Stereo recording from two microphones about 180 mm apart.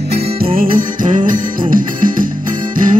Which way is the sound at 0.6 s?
45° right (ahead or behind).